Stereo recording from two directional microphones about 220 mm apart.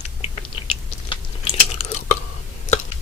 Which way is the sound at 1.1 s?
30° left (ahead or behind).